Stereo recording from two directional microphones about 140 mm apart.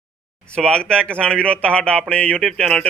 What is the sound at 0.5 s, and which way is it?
Speech, 5° left (ahead or behind).